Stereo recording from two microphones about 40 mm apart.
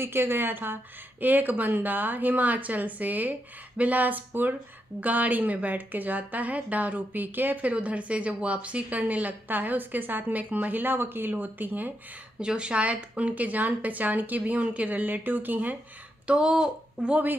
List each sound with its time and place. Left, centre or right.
0.0 s a woman's voice: right
5.0 s a woman's voice: right
7.6 s a woman's voice: right
9.0 s a woman's voice: right
12.4 s a woman's voice: right
16.3 s speech: right